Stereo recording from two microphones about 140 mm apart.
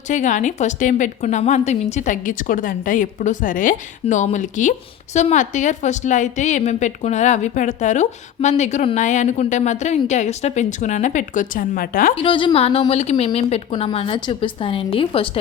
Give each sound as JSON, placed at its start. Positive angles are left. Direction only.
{"t": 0.1, "sound": "a woman's voice", "side_deg": 60}
{"t": 9.0, "sound": "a woman's voice", "side_deg": 60}
{"t": 12.1, "sound": "a woman's voice", "side_deg": 40}